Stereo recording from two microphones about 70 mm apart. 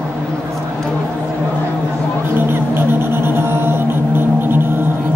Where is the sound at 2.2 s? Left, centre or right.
Right.